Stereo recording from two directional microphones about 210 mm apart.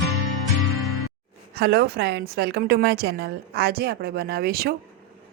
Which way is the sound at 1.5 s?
50° right (ahead or behind).